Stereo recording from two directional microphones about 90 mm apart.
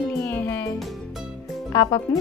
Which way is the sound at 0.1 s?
25° left (ahead or behind).